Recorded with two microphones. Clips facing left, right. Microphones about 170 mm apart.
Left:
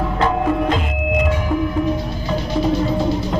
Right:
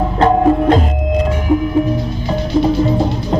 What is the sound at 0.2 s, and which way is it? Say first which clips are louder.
Music: right 7 dB; 40° right (ahead or behind).